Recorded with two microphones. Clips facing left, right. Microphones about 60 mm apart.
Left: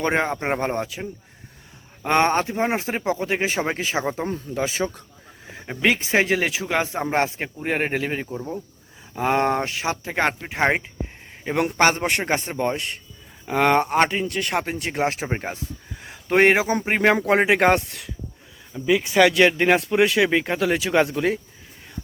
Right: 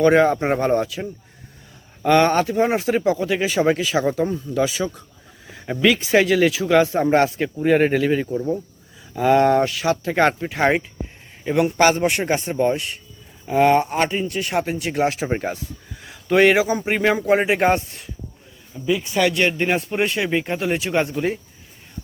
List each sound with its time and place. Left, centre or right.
0.0 s speech: left
2.0 s speech: left
4.0 s speech: centre
4.3 s a man's voice: left
4.5 s speech: left
10.1 s speech: centre
11.8 s a man's voice: left
14.6 s speech: left
15.3 s speech: centre
15.5 s a sound: left
16.7 s speech: left
18.9 s speech: left